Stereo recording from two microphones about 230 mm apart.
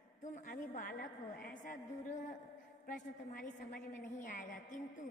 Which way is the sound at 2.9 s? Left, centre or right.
Left.